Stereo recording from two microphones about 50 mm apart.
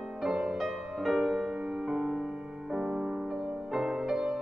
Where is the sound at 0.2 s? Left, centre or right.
Centre.